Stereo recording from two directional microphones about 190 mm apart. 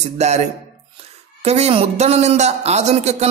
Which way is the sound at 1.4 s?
35° right (ahead or behind).